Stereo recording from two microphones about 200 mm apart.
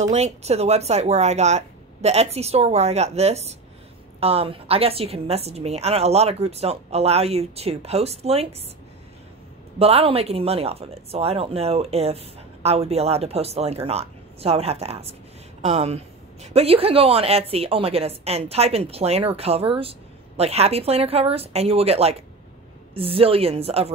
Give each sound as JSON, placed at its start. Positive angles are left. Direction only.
{"t": 0.0, "sound": "a woman's voice", "side_deg": -35}
{"t": 9.8, "sound": "a woman's voice", "side_deg": -30}